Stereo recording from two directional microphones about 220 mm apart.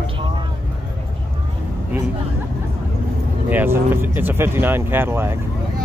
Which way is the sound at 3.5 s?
10° right (ahead or behind).